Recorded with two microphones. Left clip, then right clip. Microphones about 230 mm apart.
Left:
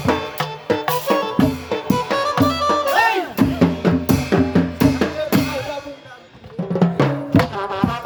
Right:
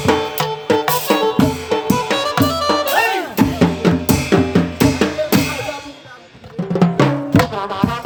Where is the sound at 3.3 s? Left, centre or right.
Right.